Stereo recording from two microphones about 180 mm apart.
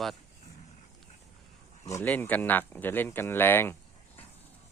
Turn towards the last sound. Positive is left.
turn(degrees=10)  # may be behind; listen again after turning